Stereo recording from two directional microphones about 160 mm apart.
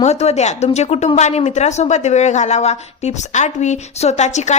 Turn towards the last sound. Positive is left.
turn(degrees=45)  # may be behind; listen again after turning